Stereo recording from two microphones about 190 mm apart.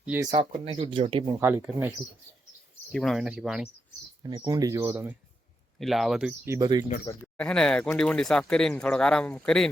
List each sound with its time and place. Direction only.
0.0 s speech: 10° right (ahead or behind)
0.3 s speech: 40° right (ahead or behind)
0.7 s speech: 25° right (ahead or behind)
1.4 s speech: 10° right (ahead or behind)
2.9 s speech: centre (ahead or behind)
4.2 s speech: 20° right (ahead or behind)
5.8 s speech: centre (ahead or behind); by 6.8 s 20° right (ahead or behind)
7.3 s speech: 5° left (ahead or behind)